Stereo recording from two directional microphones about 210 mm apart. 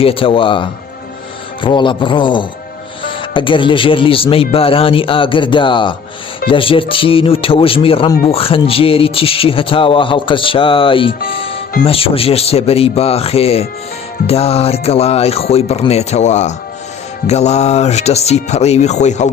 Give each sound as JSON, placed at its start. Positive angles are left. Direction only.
{"t": 0.0, "sound": "speech", "side_deg": 25}